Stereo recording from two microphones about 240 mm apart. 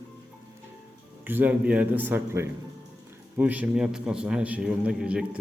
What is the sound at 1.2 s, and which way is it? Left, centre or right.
A man's voice, centre.